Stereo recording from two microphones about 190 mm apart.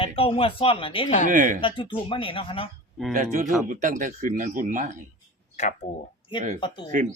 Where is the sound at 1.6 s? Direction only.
25° left (ahead or behind).